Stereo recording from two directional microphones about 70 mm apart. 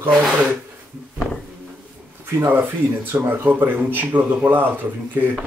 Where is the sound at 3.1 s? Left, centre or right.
Right.